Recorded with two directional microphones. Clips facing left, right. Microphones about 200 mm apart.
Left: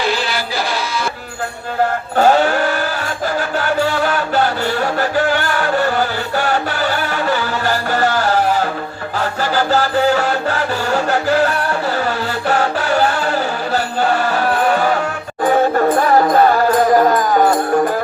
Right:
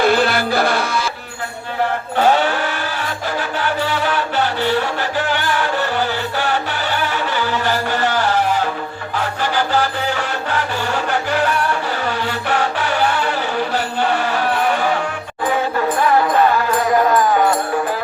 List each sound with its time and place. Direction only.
0.0 s music: 55° right (ahead or behind)
2.1 s music: 45° left (ahead or behind)